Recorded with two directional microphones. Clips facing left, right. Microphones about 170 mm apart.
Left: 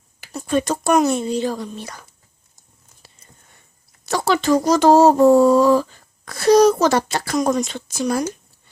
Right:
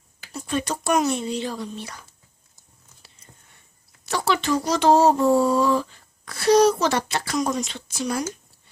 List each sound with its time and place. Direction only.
0.3 s speech: 45° left (ahead or behind)
4.0 s speech: 40° left (ahead or behind)